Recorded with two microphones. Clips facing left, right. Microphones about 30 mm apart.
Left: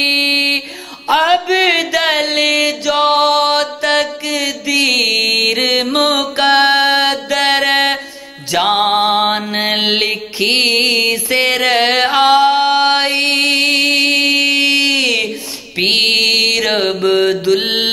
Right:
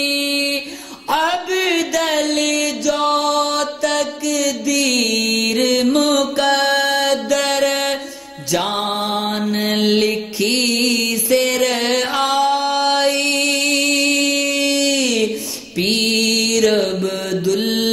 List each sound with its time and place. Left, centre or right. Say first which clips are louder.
0.0 s a sound: left 5 dB; left
1.0 s music: left 6 dB; left
8.6 s mantra: left 8 dB; left